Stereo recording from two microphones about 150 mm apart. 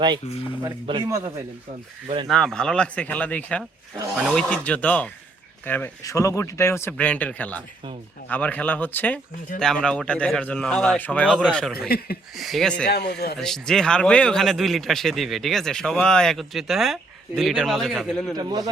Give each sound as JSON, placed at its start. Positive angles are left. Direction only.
{"t": 0.6, "sound": "speech", "side_deg": -35}
{"t": 1.0, "sound": "a man's voice", "side_deg": -20}
{"t": 2.2, "sound": "a man's voice", "side_deg": 5}
{"t": 12.9, "sound": "speech", "side_deg": 90}
{"t": 13.4, "sound": "a man's voice", "side_deg": 5}
{"t": 18.3, "sound": "a man's voice", "side_deg": -25}